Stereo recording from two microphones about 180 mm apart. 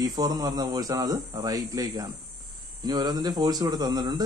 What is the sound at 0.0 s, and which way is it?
A man's voice, 20° right (ahead or behind).